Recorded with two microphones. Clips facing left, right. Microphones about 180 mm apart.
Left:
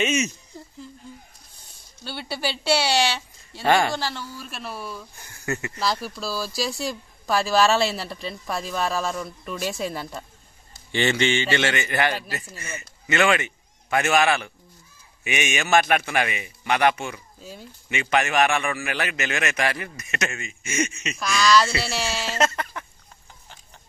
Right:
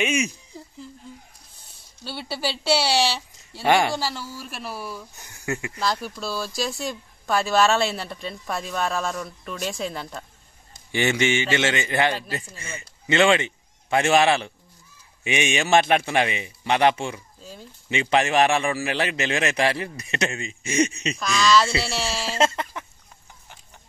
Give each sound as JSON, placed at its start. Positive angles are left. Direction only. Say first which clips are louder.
{"t": 0.0, "sound": "a man's voice", "louder": "even", "side_deg": -15}
{"t": 2.0, "sound": "speech", "louder": "even", "side_deg": 0}
{"t": 5.1, "sound": "a man's voice", "louder": "even", "side_deg": -20}
{"t": 5.8, "sound": "speech", "louder": "even", "side_deg": 5}
{"t": 10.9, "sound": "a man's voice", "louder": "even", "side_deg": -15}
{"t": 17.4, "sound": "speech", "louder": "left 1 dB", "side_deg": 5}
{"t": 17.8, "sound": "a man's voice", "louder": "right 2 dB", "side_deg": -30}
{"t": 21.2, "sound": "speech", "louder": "even", "side_deg": 0}
{"t": 22.4, "sound": "a man's voice", "louder": "right 2 dB", "side_deg": -25}